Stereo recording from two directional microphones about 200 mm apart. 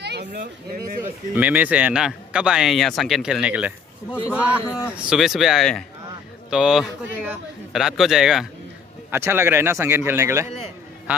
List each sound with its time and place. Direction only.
0.0 s a sound: 55° right (ahead or behind)
0.4 s speech: 45° right (ahead or behind)
1.0 s a man's voice: 10° right (ahead or behind)
4.6 s speech: 15° left (ahead or behind)
4.9 s a man's voice: centre (ahead or behind)